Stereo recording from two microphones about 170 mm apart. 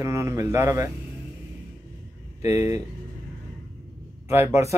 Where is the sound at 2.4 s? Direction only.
15° right (ahead or behind).